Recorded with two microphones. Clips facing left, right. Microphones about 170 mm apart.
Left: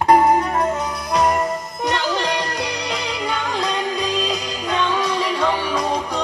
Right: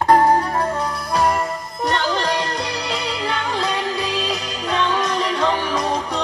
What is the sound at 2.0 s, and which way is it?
Music, 10° left (ahead or behind).